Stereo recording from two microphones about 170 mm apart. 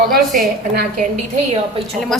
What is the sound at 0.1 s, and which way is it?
Speech, 60° right (ahead or behind).